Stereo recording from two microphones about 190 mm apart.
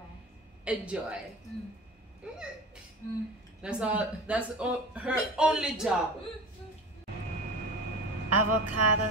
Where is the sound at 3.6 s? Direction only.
5° right (ahead or behind).